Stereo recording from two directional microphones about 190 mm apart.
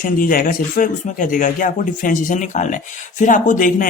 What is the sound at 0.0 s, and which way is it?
Speech, 45° left (ahead or behind).